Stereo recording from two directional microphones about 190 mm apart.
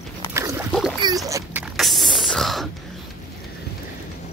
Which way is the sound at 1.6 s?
Centre (ahead or behind).